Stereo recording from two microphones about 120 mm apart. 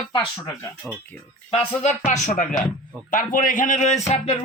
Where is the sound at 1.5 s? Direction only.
70° left (ahead or behind).